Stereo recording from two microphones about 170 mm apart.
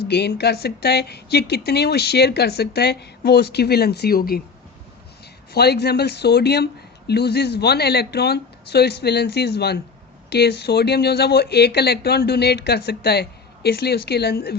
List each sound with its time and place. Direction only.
0.1 s speech: 75° left (ahead or behind)
5.5 s speech: 70° left (ahead or behind)